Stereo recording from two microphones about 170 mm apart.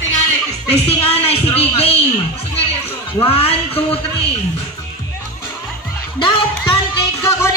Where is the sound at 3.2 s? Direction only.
35° left (ahead or behind).